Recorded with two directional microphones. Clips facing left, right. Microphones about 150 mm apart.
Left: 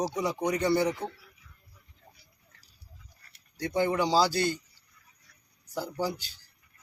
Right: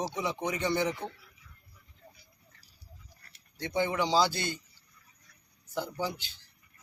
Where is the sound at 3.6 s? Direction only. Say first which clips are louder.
Left 3 dB; 40° left (ahead or behind).